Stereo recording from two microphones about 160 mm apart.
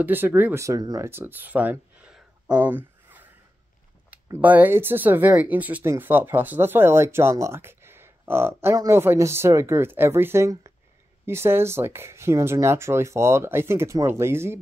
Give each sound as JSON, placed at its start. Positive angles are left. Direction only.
{"t": 0.0, "sound": "speech", "side_deg": -10}